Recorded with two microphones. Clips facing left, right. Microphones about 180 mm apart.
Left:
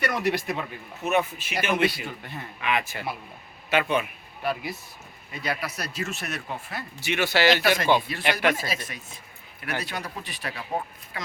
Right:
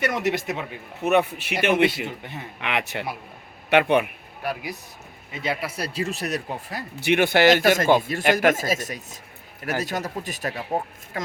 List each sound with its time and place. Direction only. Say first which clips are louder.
0.0 s speech: right 2 dB; 20° right (ahead or behind)
1.0 s speech: right 4 dB; 65° right (ahead or behind)
1.7 s speech: right 3 dB; 25° right (ahead or behind)
2.6 s speech: right 1 dB; 70° right (ahead or behind)
4.4 s speech: left 1 dB; 10° right (ahead or behind)
5.3 s speech: right 3 dB; 25° right (ahead or behind)
7.0 s speech: right 5 dB; 55° right (ahead or behind)